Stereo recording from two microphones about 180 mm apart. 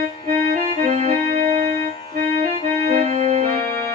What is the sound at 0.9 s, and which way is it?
Music, 35° right (ahead or behind).